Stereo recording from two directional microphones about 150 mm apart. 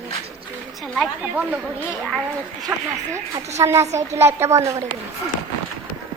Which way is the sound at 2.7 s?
20° right (ahead or behind).